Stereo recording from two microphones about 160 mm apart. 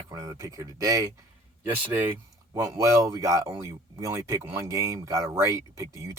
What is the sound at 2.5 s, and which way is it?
Speech, 15° right (ahead or behind).